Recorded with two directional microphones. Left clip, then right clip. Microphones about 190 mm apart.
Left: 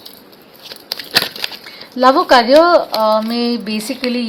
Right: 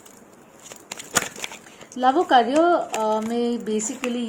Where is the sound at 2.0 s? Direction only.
35° left (ahead or behind).